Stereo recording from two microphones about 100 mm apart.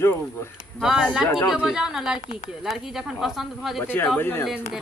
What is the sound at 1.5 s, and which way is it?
A woman's voice, 5° right (ahead or behind).